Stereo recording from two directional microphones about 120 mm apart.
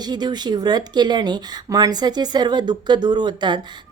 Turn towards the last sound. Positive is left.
turn(degrees=-40)  # may be behind; listen again after turning